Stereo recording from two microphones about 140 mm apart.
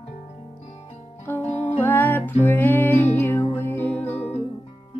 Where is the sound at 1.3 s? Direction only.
15° left (ahead or behind).